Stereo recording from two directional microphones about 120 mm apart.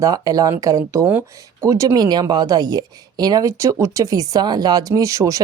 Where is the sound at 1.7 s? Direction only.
25° right (ahead or behind).